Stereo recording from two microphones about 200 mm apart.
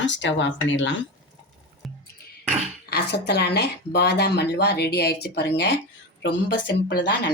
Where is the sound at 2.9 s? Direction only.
55° left (ahead or behind).